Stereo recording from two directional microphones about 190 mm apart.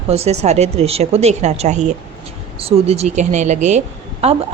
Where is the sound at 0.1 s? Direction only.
35° right (ahead or behind).